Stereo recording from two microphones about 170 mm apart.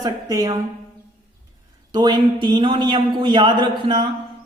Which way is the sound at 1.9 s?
25° right (ahead or behind).